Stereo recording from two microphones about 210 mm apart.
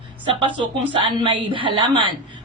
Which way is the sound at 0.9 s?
25° right (ahead or behind).